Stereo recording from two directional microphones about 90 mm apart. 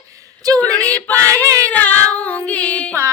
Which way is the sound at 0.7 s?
15° left (ahead or behind).